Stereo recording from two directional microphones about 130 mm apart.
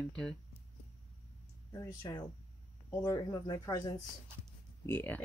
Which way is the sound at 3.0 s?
25° left (ahead or behind).